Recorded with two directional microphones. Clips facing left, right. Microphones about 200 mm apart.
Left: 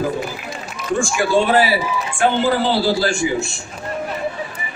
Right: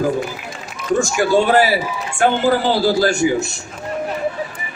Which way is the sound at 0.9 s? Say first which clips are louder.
Right 2 dB; 40° right (ahead or behind).